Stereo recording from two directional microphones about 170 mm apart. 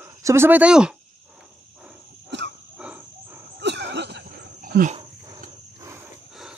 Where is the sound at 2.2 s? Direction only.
90° right.